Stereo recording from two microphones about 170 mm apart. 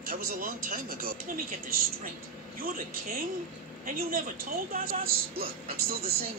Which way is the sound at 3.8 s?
55° right (ahead or behind).